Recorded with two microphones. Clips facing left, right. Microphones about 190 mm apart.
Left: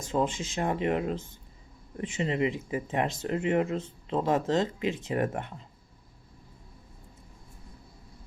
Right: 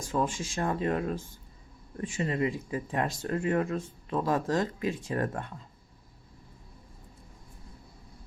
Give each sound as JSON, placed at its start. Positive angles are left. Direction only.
{"t": 0.0, "sound": "speech", "side_deg": 20}